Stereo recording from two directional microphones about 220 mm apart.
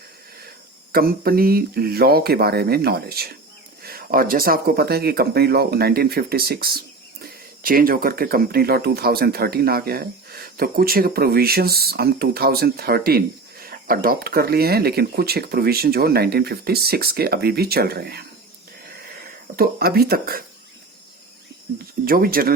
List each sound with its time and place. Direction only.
0.9 s speech: 40° right (ahead or behind)
19.5 s speech: 45° right (ahead or behind)
22.0 s speech: 40° right (ahead or behind)